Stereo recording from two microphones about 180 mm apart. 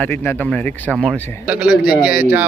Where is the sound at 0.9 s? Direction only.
5° right (ahead or behind).